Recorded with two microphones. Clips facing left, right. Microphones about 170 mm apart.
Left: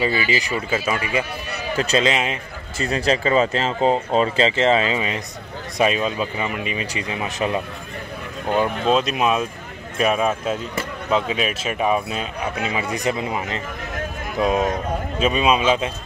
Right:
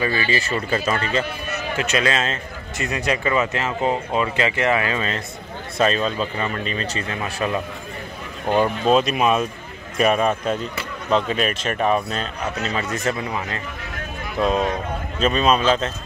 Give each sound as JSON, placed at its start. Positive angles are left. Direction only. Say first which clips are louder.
{"t": 0.0, "sound": "speech", "louder": "left 1 dB", "side_deg": 15}
{"t": 1.8, "sound": "speech", "louder": "left 3 dB", "side_deg": 35}
{"t": 2.0, "sound": "speech", "louder": "left 1 dB", "side_deg": 15}
{"t": 2.8, "sound": "speech", "louder": "left 3 dB", "side_deg": 30}
{"t": 8.5, "sound": "speech", "louder": "right 2 dB", "side_deg": -10}
{"t": 8.8, "sound": "speech", "louder": "right 2 dB", "side_deg": 0}